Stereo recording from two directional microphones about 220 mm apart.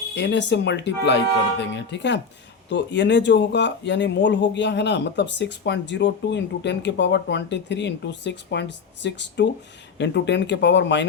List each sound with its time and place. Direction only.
0.1 s speech: 50° left (ahead or behind)